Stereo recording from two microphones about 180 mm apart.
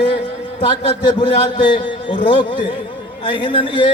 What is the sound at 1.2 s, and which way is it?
A man's voice, 30° left (ahead or behind).